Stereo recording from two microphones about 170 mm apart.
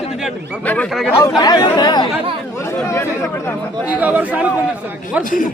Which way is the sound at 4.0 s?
10° right (ahead or behind).